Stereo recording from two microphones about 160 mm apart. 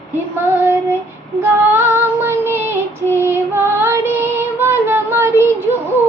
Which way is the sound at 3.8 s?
15° right (ahead or behind).